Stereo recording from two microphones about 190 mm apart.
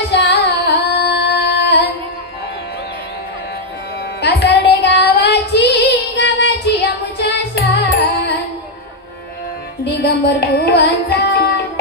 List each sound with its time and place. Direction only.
0.1 s singing: 65° left (ahead or behind)
4.2 s child singing: 60° left (ahead or behind)
9.8 s music: 60° left (ahead or behind)